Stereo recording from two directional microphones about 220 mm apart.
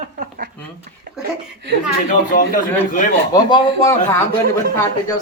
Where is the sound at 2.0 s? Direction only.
35° left (ahead or behind).